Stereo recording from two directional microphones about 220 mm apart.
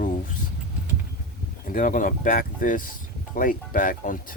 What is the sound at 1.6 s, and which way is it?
Speech, 35° left (ahead or behind).